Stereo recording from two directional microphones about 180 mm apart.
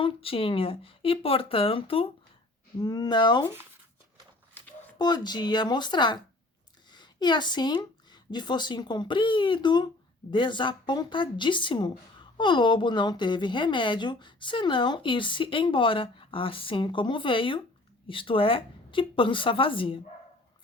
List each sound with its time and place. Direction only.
0.0 s speech: 30° left (ahead or behind)
4.9 s a woman's voice: 25° left (ahead or behind)